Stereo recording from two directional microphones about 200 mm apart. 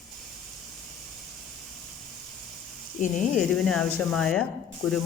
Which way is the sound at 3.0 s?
40° left (ahead or behind).